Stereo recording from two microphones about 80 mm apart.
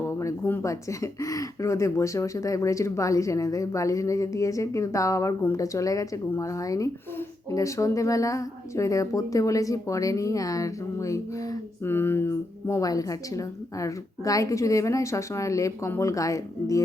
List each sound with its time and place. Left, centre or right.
0.6 s speech: left
11.9 s speech: left